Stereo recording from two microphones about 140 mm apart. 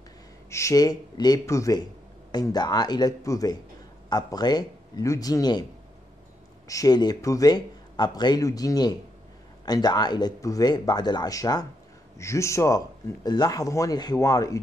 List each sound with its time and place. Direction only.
0.5 s speech: 20° left (ahead or behind)
6.7 s speech: 25° left (ahead or behind)